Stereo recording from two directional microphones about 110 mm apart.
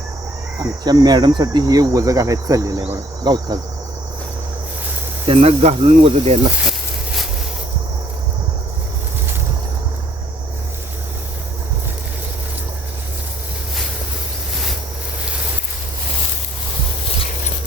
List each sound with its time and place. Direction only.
0.6 s cricket: 40° right (ahead or behind)
5.3 s speech: 65° right (ahead or behind)